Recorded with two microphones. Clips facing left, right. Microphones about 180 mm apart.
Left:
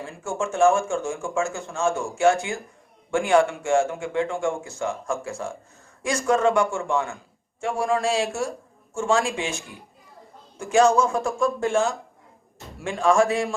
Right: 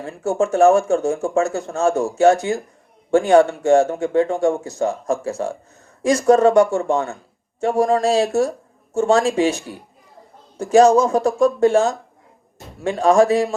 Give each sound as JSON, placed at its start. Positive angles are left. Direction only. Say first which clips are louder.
{"t": 0.0, "sound": "speech", "louder": "right 8 dB", "side_deg": -40}